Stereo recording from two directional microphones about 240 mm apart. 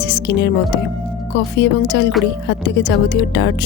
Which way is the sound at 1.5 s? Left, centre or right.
Left.